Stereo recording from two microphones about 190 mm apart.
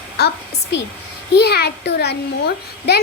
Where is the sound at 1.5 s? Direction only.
60° left (ahead or behind).